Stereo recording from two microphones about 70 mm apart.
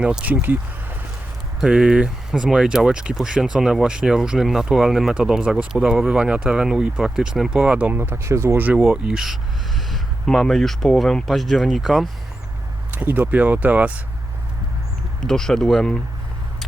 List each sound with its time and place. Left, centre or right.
0.0 s speech: centre
0.4 s speech: right
1.6 s speech: centre
7.9 s speech: right
8.5 s speech: right
8.8 s speech: centre
12.9 s speech: right
15.2 s speech: centre